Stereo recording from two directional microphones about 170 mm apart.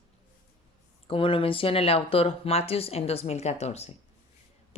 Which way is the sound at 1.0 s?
30° left (ahead or behind).